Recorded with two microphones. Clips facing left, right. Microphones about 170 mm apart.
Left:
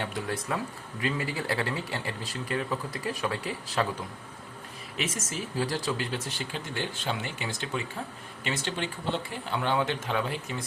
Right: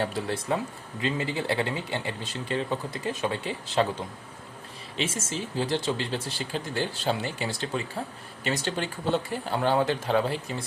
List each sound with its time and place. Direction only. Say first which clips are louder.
0.0 s speech: right 4 dB; 30° right (ahead or behind)
4.9 s speech: right 3 dB; 30° right (ahead or behind)